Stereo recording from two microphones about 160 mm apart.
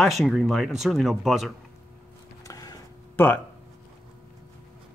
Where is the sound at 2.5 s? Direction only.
20° left (ahead or behind).